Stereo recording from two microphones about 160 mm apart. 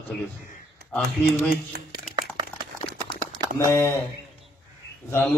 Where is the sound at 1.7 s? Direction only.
80° right.